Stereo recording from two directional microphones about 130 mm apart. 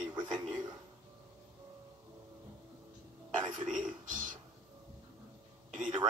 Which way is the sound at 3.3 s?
35° right (ahead or behind).